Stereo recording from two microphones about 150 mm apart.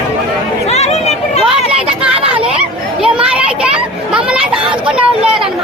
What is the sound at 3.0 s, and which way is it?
Children playing, 5° right (ahead or behind).